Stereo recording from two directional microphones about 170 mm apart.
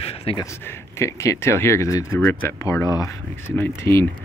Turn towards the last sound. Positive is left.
turn(degrees=15)  # may be behind; listen again after turning